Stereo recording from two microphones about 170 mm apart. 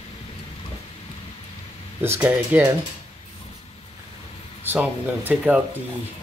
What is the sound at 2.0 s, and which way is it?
Speech, 10° right (ahead or behind).